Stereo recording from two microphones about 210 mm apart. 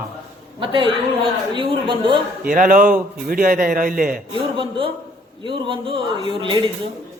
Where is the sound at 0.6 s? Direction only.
25° right (ahead or behind).